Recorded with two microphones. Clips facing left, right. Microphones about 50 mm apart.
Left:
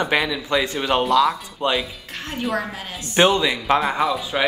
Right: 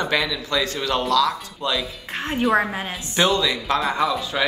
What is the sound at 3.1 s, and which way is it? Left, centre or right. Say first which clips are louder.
Speech: left 3 dB; left.